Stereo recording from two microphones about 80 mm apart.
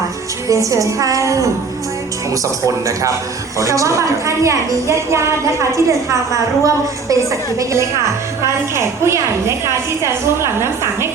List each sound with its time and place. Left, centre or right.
0.4 s a woman's voice: right